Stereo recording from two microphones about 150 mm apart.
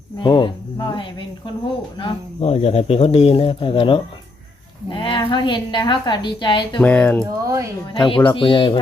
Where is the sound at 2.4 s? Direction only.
45° left (ahead or behind).